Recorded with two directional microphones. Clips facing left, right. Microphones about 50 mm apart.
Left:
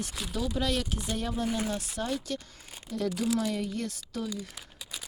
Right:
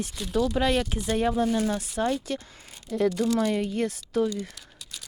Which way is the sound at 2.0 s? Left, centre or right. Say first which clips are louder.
Right 9 dB; right.